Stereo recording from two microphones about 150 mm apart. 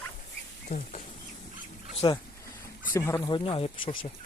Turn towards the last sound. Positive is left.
turn(degrees=35)  # may be behind; listen again after turning